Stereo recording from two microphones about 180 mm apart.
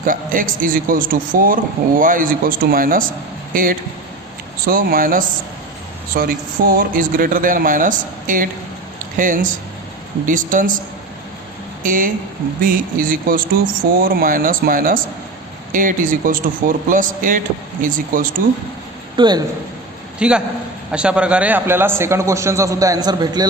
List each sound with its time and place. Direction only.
0.0 s speech: 50° right (ahead or behind)
11.8 s speech: 50° right (ahead or behind)
19.1 s speech: 25° right (ahead or behind)
20.1 s a man's voice: 5° right (ahead or behind); by 23.5 s 20° right (ahead or behind)